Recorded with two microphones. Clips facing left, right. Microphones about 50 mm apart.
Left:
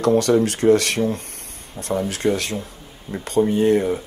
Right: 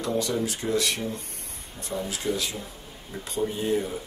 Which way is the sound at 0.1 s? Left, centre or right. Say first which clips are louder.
Left 9 dB; left.